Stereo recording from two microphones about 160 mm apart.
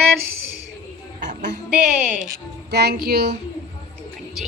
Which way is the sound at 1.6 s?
5° right (ahead or behind).